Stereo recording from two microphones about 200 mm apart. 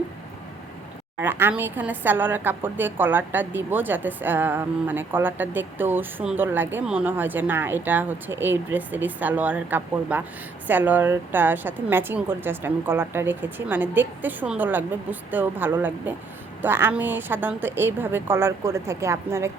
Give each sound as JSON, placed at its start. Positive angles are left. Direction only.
{"t": 1.2, "sound": "a woman's voice", "side_deg": -10}